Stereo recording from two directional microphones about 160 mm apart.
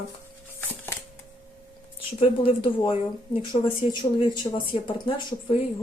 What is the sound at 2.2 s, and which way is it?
Speech, 35° left (ahead or behind).